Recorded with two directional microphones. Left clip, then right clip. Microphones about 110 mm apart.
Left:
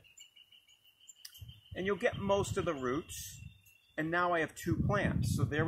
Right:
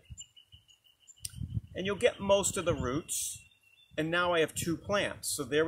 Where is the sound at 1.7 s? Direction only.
35° right (ahead or behind).